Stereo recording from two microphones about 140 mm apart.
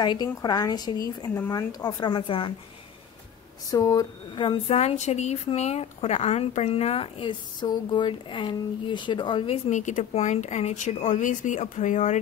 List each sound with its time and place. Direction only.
0.0 s a woman's voice: 30° left (ahead or behind)
3.7 s a woman's voice: 25° left (ahead or behind)
4.4 s speech: 35° left (ahead or behind)
4.7 s speech: 55° left (ahead or behind); by 9.6 s 35° left (ahead or behind)
9.7 s speech: 60° left (ahead or behind)